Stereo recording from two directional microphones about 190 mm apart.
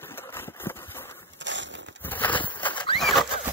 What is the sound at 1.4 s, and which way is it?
Crushing, 70° right (ahead or behind).